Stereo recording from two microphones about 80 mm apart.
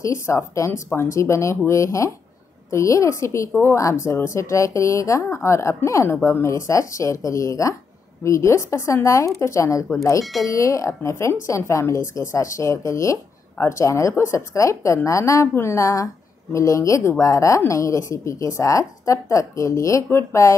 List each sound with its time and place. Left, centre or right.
0.0 s a woman's voice: left